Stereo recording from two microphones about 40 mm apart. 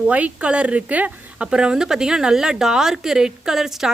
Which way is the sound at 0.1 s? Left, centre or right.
Right.